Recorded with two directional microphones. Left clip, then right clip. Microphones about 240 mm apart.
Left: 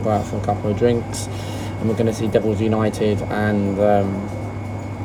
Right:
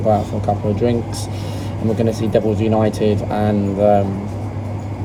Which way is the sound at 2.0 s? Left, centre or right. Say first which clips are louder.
Right 2 dB; centre.